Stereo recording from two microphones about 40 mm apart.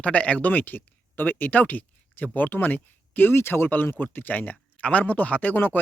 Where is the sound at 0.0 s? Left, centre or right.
Left.